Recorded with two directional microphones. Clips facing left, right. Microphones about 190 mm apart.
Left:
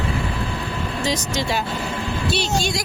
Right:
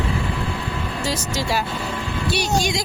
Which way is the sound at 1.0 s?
5° right (ahead or behind).